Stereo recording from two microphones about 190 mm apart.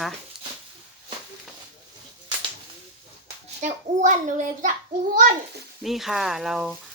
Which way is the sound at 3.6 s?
40° right (ahead or behind).